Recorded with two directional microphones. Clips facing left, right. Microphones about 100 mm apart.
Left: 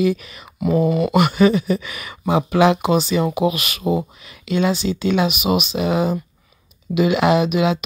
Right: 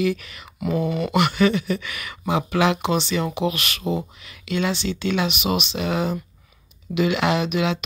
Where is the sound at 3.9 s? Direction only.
20° left (ahead or behind).